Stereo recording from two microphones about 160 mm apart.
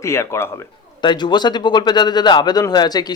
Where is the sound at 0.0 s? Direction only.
15° left (ahead or behind).